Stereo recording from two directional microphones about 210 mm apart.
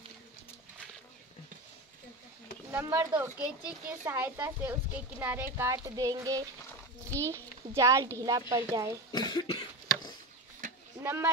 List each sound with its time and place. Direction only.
2.7 s a child's voice: 10° right (ahead or behind)
9.1 s cough: 20° left (ahead or behind)
10.6 s sheep: 40° right (ahead or behind)
11.0 s a sound: 10° right (ahead or behind)